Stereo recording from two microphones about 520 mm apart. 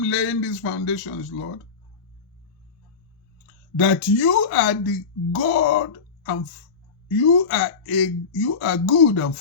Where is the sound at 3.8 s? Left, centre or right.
Left.